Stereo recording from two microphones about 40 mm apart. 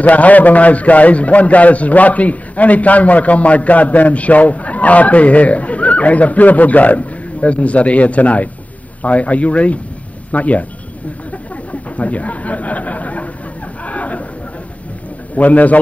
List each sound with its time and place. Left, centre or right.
0.0 s a man's voice: left
12.0 s a man's voice: left
13.8 s a sound: left
15.3 s a man's voice: left